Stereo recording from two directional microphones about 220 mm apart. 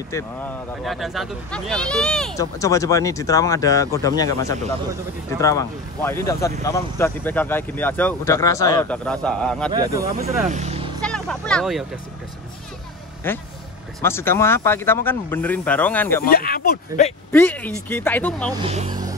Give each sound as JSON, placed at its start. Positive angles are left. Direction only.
{"t": 0.1, "sound": "speech", "side_deg": 10}
{"t": 0.8, "sound": "speech", "side_deg": 0}
{"t": 2.3, "sound": "speech", "side_deg": 15}
{"t": 8.9, "sound": "speech", "side_deg": 5}
{"t": 9.7, "sound": "speech", "side_deg": -20}
{"t": 10.5, "sound": "speech", "side_deg": -30}
{"t": 11.0, "sound": "speech", "side_deg": 5}
{"t": 13.2, "sound": "speech", "side_deg": 10}
{"t": 16.3, "sound": "speech", "side_deg": 40}
{"t": 17.3, "sound": "speech", "side_deg": 10}
{"t": 18.6, "sound": "speech", "side_deg": -25}